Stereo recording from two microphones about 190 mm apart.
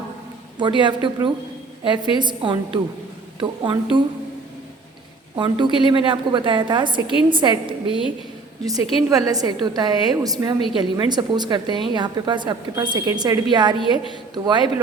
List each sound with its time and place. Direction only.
0.6 s a woman's voice: 25° right (ahead or behind)
5.4 s a woman's voice: 25° right (ahead or behind)
9.0 s a woman's voice: 20° right (ahead or behind)